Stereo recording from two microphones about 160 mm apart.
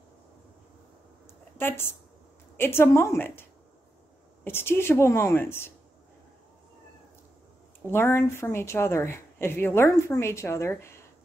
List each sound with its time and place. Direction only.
1.6 s a woman's voice: 15° left (ahead or behind)
4.5 s a woman's voice: 15° left (ahead or behind)
7.9 s a woman's voice: 15° left (ahead or behind)